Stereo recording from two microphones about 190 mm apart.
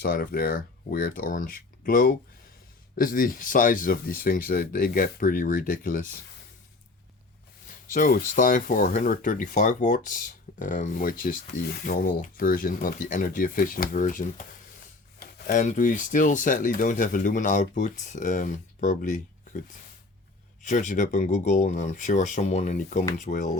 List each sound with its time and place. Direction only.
0.0 s speech: 50° left (ahead or behind)
7.7 s speech: 45° left (ahead or behind)
20.7 s speech: 40° left (ahead or behind)